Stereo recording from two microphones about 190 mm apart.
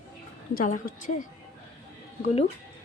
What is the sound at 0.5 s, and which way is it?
A woman's voice, 45° left (ahead or behind).